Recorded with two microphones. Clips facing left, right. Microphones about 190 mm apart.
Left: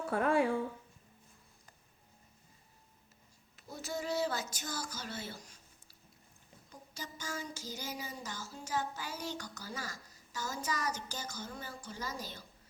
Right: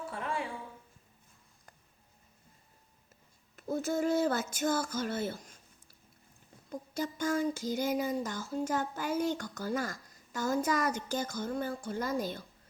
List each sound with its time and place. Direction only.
0.1 s speech: 60° left (ahead or behind)
3.5 s speech: 50° right (ahead or behind)
6.7 s a sound: 55° right (ahead or behind)